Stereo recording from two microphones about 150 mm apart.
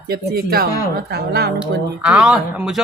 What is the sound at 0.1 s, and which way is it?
A woman's voice, 90° right.